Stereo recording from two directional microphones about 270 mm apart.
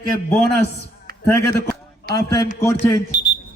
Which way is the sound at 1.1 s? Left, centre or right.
Right.